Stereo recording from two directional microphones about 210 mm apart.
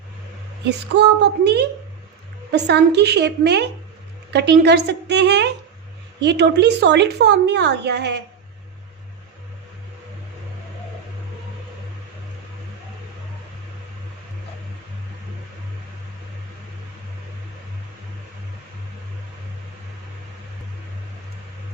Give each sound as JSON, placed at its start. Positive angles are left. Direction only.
{"t": 0.9, "sound": "a woman's voice", "side_deg": -50}